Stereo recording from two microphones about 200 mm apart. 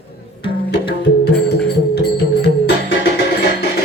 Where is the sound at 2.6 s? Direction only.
55° left (ahead or behind).